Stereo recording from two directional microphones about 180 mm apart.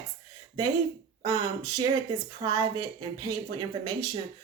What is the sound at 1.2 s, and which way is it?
Speech, 20° right (ahead or behind).